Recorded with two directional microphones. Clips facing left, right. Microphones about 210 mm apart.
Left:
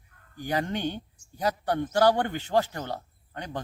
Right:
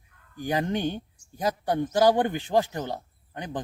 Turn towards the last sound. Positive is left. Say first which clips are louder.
# right 2 dB
turn(degrees=-15)  # may be behind; listen again after turning